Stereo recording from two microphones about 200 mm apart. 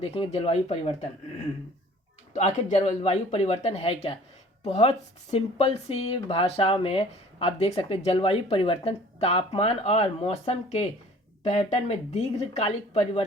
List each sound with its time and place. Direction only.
0.0 s speech: 30° left (ahead or behind)
2.3 s speech: 35° left (ahead or behind)